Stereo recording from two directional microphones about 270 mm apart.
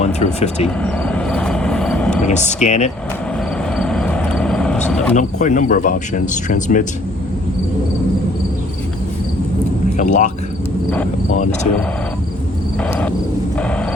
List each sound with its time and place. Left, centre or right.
0.0 s speech: left
0.8 s vehicle: centre
2.2 s speech: left
3.8 s vehicle: centre
5.1 s speech: left
10.0 s speech: left
12.8 s cricket: centre